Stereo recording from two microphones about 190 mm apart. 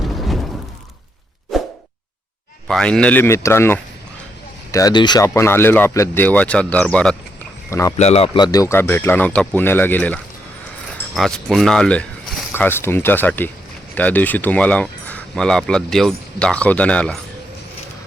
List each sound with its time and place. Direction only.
0.0 s a sound: centre (ahead or behind)
1.5 s plop: centre (ahead or behind)
2.6 s speech: 5° left (ahead or behind)
7.7 s speech: 15° left (ahead or behind)
7.9 s speech: 35° left (ahead or behind); by 12.5 s centre (ahead or behind)
12.5 s speech: 10° left (ahead or behind)